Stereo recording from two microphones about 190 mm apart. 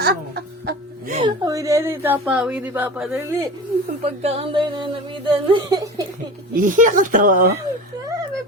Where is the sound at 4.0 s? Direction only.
30° right (ahead or behind).